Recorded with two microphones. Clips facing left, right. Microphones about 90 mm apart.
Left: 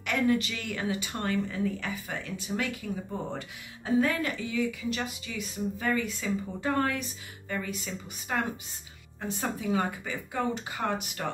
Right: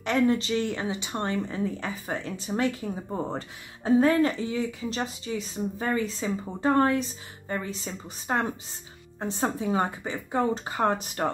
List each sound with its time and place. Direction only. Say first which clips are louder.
0.0 s speech: right 3 dB; 30° right (ahead or behind)